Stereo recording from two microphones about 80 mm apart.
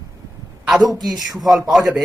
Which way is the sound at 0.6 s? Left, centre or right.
Centre.